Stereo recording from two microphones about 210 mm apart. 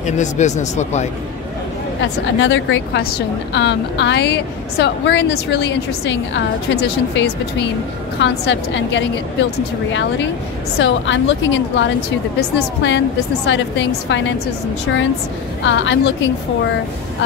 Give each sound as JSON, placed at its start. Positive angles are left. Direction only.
{"t": 0.0, "sound": "speech", "side_deg": 35}
{"t": 2.3, "sound": "a woman's voice", "side_deg": 65}
{"t": 10.8, "sound": "a woman's voice", "side_deg": 60}
{"t": 15.6, "sound": "a woman's voice", "side_deg": 60}